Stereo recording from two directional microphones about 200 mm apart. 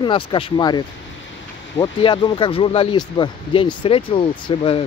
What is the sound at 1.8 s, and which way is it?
Speech, 25° left (ahead or behind).